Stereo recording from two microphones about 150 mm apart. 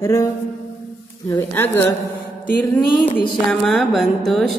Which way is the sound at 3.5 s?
Centre (ahead or behind).